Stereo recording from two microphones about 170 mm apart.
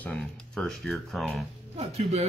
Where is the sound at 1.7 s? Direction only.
40° right (ahead or behind).